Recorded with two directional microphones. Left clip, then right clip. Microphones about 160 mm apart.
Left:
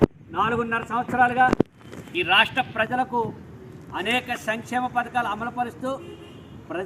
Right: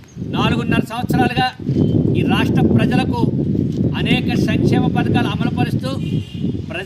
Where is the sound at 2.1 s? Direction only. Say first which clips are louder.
Left 5 dB; 10° right (ahead or behind).